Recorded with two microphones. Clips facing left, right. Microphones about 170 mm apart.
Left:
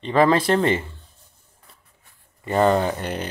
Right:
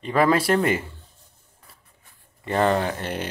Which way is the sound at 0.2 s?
10° right (ahead or behind).